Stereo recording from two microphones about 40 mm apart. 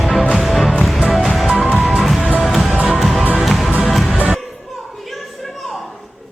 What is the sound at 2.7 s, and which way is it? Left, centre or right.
Music, right.